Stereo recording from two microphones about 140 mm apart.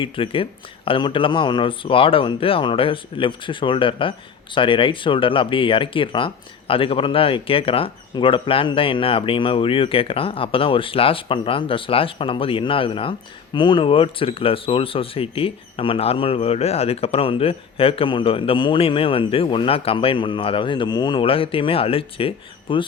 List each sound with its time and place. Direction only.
0.0 s speech: 40° left (ahead or behind)